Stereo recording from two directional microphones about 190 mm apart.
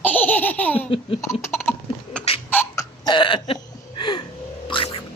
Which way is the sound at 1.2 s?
15° left (ahead or behind).